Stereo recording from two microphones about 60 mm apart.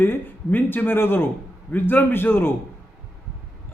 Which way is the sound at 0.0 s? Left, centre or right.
Left.